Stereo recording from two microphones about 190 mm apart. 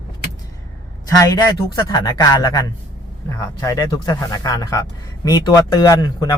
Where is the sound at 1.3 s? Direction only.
20° left (ahead or behind).